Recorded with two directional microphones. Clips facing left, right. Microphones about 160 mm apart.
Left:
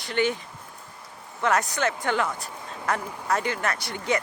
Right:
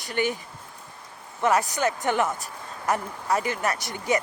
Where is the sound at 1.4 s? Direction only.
15° right (ahead or behind).